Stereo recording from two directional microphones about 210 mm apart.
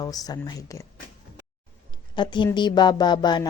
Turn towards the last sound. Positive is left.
turn(degrees=20)  # may be behind; listen again after turning